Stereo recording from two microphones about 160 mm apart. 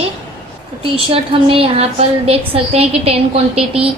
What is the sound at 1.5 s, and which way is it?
A woman's voice, 40° right (ahead or behind).